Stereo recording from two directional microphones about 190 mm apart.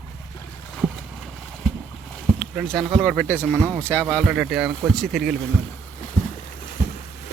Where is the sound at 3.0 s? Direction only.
5° left (ahead or behind).